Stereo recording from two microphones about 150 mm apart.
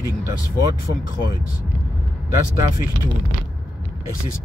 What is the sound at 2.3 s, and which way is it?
Speech, 20° right (ahead or behind).